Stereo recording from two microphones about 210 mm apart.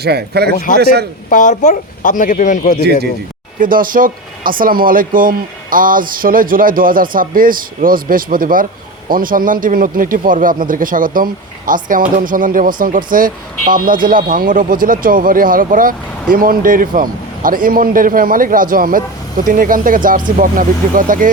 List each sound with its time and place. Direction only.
0.0 s a man's voice: 50° right (ahead or behind)
0.5 s speech: 40° left (ahead or behind)
3.6 s a man's voice: 40° right (ahead or behind)